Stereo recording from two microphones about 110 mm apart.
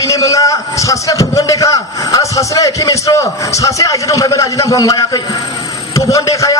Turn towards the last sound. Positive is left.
turn(degrees=30)  # may be behind; listen again after turning